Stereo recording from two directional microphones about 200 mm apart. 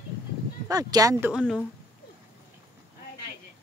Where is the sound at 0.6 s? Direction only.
15° right (ahead or behind).